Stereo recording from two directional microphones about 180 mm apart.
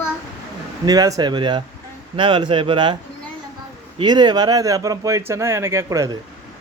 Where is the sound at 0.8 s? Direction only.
20° right (ahead or behind).